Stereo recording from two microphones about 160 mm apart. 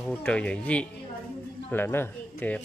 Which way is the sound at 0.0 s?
10° left (ahead or behind).